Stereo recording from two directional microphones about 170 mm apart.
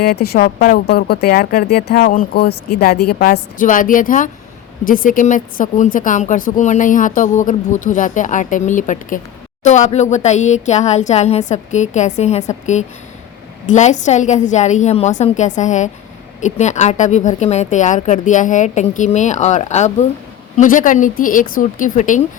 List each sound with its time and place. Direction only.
0.0 s a woman's voice: 65° left (ahead or behind); by 22.2 s 50° left (ahead or behind)